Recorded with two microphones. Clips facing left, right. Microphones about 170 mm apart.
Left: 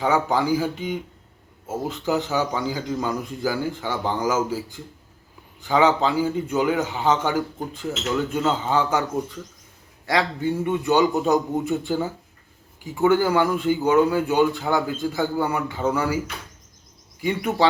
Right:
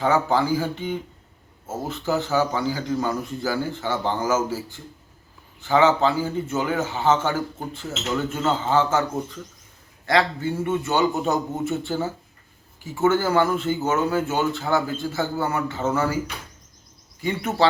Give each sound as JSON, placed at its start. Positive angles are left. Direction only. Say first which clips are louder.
{"t": 0.0, "sound": "a man's voice", "louder": "right 1 dB", "side_deg": 15}
{"t": 10.1, "sound": "a man's voice", "louder": "right 1 dB", "side_deg": 15}